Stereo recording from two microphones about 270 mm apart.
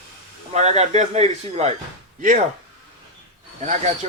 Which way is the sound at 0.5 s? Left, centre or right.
Right.